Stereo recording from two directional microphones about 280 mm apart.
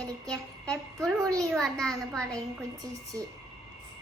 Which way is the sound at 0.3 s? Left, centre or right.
Centre.